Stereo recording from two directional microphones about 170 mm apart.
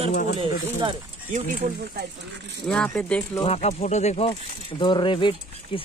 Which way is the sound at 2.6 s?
5° left (ahead or behind).